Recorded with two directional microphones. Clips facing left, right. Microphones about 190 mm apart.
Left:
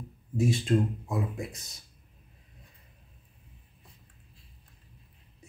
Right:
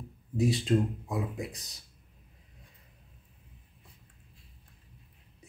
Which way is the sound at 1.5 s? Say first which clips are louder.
Even; 35° right (ahead or behind).